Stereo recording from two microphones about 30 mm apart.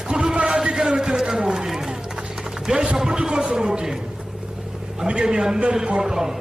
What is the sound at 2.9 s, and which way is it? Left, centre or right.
Speech, centre.